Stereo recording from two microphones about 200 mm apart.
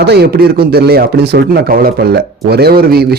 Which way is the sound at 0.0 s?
55° right (ahead or behind).